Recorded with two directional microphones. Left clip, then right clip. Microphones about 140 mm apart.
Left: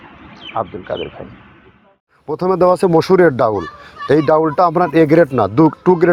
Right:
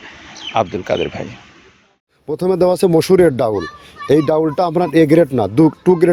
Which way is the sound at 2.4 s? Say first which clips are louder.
Left 1 dB; 40° right (ahead or behind).